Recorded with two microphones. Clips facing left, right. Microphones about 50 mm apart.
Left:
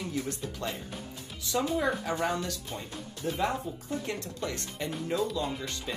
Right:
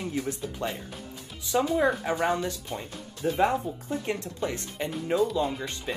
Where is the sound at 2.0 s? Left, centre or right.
Right.